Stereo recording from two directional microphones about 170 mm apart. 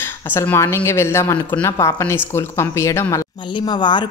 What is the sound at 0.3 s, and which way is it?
A woman's voice, 15° left (ahead or behind).